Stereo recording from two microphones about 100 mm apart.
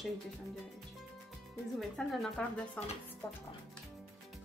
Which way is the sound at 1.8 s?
5° left (ahead or behind).